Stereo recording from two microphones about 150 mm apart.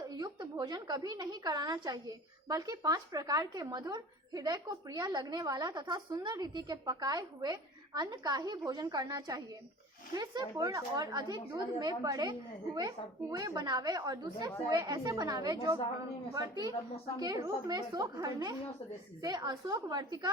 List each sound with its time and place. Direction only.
0.1 s a woman's voice: 25° right (ahead or behind)